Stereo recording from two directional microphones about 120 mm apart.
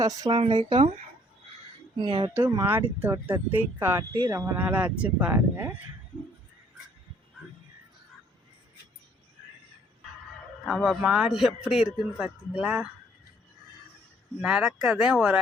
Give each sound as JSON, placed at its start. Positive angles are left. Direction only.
{"t": 0.3, "sound": "speech", "side_deg": -45}
{"t": 2.0, "sound": "speech", "side_deg": -40}
{"t": 2.3, "sound": "speech", "side_deg": -20}
{"t": 4.5, "sound": "speech", "side_deg": -10}
{"t": 10.7, "sound": "a man's voice", "side_deg": 0}
{"t": 14.4, "sound": "speech", "side_deg": -5}